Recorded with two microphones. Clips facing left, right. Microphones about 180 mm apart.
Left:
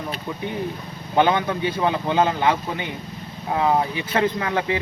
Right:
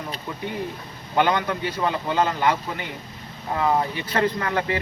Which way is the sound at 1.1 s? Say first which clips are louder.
Left 2 dB; 20° left (ahead or behind).